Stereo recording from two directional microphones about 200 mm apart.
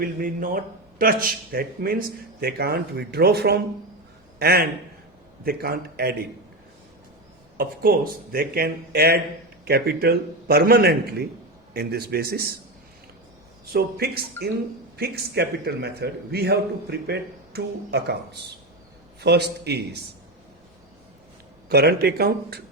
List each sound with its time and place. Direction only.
0.0 s a man's voice: 45° right (ahead or behind)
7.5 s speech: 45° right (ahead or behind)
13.7 s a man's voice: 50° right (ahead or behind)
21.7 s speech: 50° right (ahead or behind)